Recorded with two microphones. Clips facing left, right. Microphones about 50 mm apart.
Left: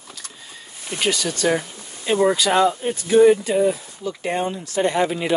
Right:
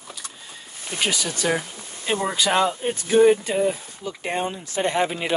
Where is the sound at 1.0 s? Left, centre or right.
Centre.